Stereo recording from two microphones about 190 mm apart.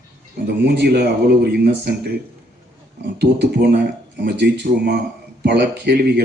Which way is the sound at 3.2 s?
65° right (ahead or behind).